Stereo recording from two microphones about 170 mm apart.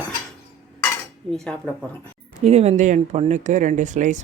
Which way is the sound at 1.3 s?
5° left (ahead or behind).